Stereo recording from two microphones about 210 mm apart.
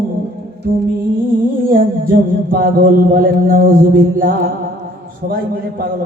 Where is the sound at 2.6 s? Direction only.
40° right (ahead or behind).